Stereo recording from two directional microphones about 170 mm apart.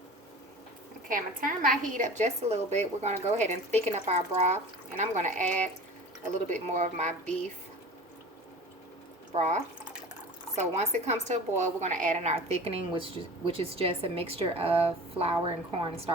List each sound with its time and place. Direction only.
1.0 s speech: 55° right (ahead or behind)
6.7 s speech: 40° right (ahead or behind)
9.3 s a woman's voice: 40° right (ahead or behind)